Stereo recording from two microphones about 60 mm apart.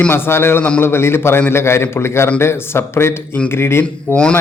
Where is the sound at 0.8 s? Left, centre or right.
Left.